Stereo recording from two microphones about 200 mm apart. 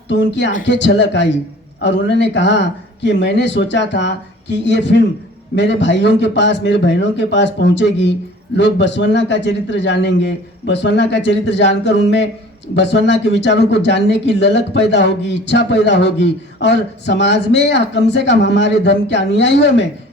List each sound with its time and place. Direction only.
0.1 s speech: 60° left (ahead or behind)